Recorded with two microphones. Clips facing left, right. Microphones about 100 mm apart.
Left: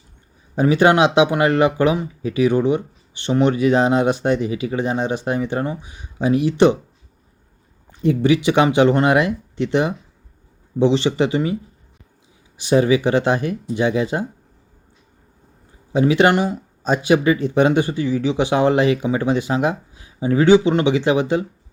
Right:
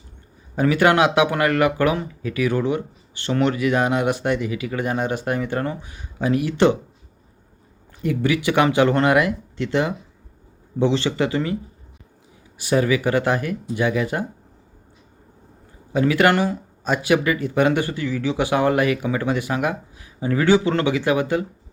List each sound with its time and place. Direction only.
0.5 s speech: 25° left (ahead or behind)
8.0 s speech: 25° left (ahead or behind)
12.5 s speech: 25° left (ahead or behind)
15.9 s speech: 20° left (ahead or behind)